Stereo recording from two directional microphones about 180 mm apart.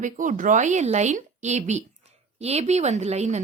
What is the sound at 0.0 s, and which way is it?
Speech, 45° right (ahead or behind).